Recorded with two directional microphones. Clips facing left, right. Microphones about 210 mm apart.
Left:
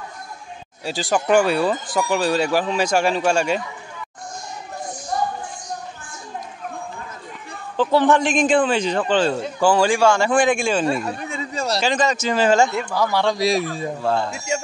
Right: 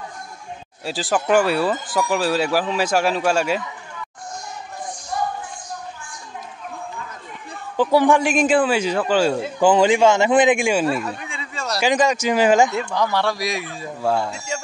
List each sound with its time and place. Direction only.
0.8 s speech: 5° right (ahead or behind)
7.7 s a man's voice: 10° right (ahead or behind)
11.1 s a sound: 40° left (ahead or behind)
11.8 s a man's voice: 15° right (ahead or behind)
12.7 s speech: 5° left (ahead or behind)
13.2 s a man's voice: 20° left (ahead or behind)
13.5 s a man's voice: 40° left (ahead or behind)
14.0 s a man's voice: 10° right (ahead or behind)
14.3 s speech: 10° left (ahead or behind)